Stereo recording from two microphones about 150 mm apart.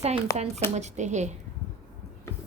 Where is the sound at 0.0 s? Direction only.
45° right (ahead or behind).